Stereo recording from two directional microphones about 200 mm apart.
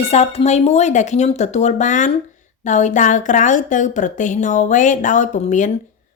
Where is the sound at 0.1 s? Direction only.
30° left (ahead or behind).